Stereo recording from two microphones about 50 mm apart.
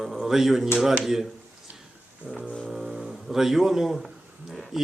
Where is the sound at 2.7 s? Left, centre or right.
Centre.